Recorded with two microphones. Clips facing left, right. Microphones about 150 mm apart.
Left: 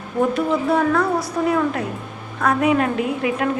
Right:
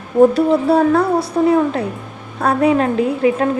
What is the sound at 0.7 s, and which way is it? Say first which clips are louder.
A woman's voice: right 5 dB; 30° right (ahead or behind).